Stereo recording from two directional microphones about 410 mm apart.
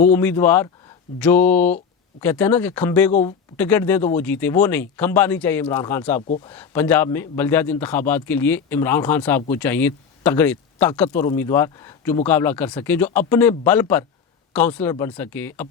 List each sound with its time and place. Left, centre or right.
0.0 s a man's voice: centre
3.1 s speech: centre
3.6 s a man's voice: centre
6.2 s speech: centre
6.5 s a man's voice: centre